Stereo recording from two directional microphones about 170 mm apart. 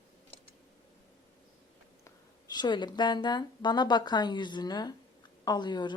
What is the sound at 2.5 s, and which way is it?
A woman's voice, 25° left (ahead or behind).